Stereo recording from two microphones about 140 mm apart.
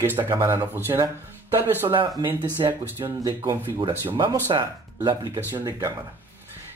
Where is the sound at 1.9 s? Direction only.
35° right (ahead or behind).